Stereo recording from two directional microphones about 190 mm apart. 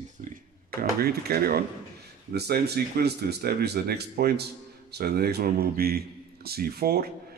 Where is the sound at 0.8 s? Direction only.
55° right (ahead or behind).